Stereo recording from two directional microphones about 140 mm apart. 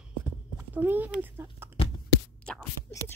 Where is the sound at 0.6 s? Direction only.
15° right (ahead or behind).